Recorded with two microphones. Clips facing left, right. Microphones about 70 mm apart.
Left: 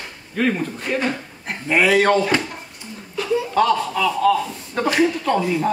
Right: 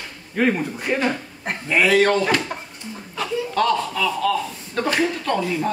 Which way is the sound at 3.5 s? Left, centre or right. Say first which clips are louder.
Left 1 dB; centre.